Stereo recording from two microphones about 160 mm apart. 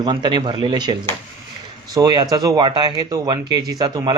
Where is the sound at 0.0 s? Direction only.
30° right (ahead or behind).